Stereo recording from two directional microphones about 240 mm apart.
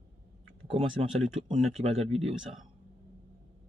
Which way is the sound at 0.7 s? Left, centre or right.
Right.